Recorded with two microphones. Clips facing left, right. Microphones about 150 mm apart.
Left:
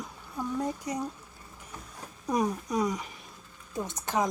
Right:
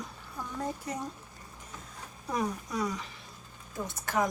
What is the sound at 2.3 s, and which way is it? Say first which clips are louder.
Speech: left 4 dB; 20° left (ahead or behind).